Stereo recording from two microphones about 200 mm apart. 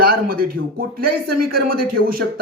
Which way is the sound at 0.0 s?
45° right (ahead or behind).